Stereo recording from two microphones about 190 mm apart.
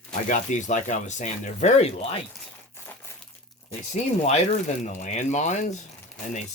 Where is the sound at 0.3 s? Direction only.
40° left (ahead or behind).